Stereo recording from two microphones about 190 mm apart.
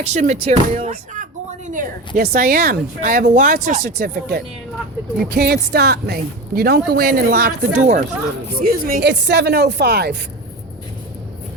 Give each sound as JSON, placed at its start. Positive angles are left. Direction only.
{"t": 0.0, "sound": "speech", "side_deg": -40}
{"t": 9.0, "sound": "a woman's voice", "side_deg": -65}